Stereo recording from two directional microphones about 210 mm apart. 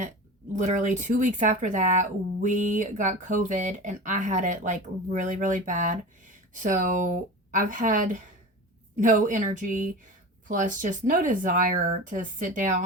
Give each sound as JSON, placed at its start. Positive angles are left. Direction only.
{"t": 0.5, "sound": "speech", "side_deg": -35}